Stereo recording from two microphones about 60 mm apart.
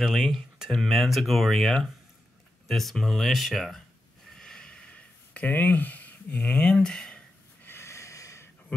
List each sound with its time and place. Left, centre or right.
0.0 s speech: centre
4.4 s a sound: centre
7.6 s snort: left